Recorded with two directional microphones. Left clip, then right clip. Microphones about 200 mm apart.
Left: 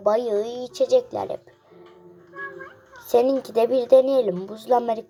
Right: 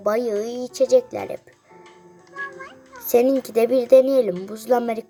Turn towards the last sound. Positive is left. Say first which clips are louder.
# even
turn(degrees=-20)  # may be behind; listen again after turning